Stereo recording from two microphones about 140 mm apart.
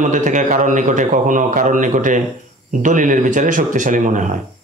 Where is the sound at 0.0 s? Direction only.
65° right (ahead or behind).